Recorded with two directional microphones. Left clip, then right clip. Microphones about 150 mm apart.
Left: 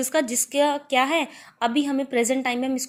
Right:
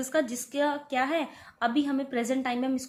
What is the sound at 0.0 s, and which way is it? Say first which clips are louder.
A woman's voice: left 5 dB; 30° left (ahead or behind).